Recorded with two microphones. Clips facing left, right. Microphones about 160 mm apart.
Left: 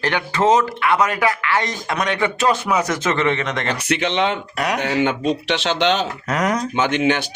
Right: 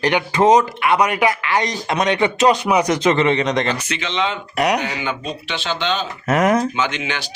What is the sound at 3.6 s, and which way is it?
Speech, 60° left (ahead or behind).